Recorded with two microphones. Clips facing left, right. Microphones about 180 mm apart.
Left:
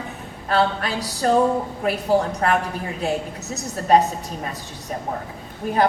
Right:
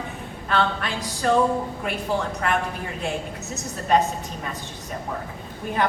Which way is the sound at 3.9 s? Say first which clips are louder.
Left 4 dB; 35° left (ahead or behind).